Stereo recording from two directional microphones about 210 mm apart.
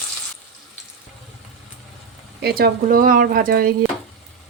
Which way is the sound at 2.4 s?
45° right (ahead or behind).